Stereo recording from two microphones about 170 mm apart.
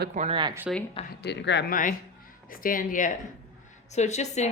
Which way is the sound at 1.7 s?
50° left (ahead or behind).